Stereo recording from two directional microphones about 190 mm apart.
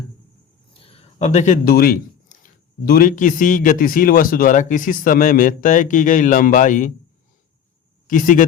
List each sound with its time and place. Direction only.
0.7 s a sound: 30° left (ahead or behind); by 2.0 s 50° left (ahead or behind)
2.4 s a man's voice: 50° left (ahead or behind)
8.0 s speech: 45° left (ahead or behind)